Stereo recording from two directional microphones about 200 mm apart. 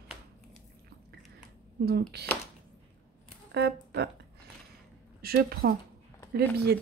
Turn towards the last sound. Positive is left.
turn(degrees=-55)  # may be behind; listen again after turning